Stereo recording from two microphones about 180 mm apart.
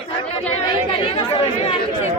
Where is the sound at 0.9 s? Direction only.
30° left (ahead or behind).